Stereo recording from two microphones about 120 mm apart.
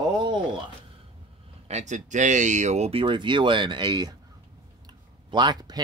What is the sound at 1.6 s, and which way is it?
Speech, 75° right (ahead or behind).